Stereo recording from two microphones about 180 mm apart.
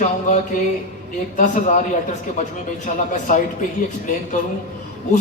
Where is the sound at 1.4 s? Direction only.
45° left (ahead or behind).